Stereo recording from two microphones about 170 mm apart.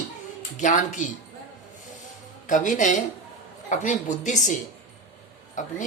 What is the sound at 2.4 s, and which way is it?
Speech, 50° left (ahead or behind).